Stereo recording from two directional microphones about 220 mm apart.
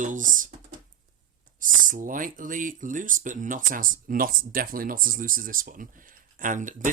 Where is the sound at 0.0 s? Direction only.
35° right (ahead or behind).